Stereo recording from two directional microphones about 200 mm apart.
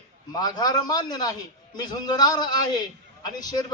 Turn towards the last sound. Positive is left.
turn(degrees=20)  # may be behind; listen again after turning